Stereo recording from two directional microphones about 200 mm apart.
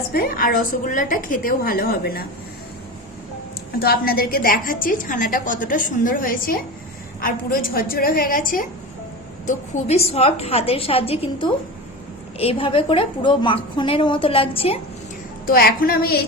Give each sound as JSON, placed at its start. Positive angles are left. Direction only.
{"t": 0.1, "sound": "a woman's voice", "side_deg": 45}
{"t": 3.8, "sound": "a woman's voice", "side_deg": 50}
{"t": 15.4, "sound": "a woman's voice", "side_deg": 45}